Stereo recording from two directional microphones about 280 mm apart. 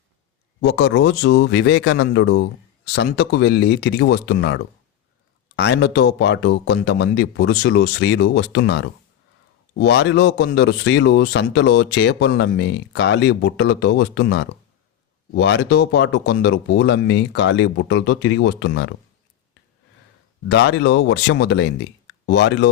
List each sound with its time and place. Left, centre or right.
0.6 s speech: left
20.5 s speech: left